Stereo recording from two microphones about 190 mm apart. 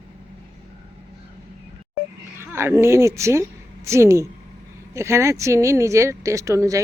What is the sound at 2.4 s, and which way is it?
Speech, 10° right (ahead or behind).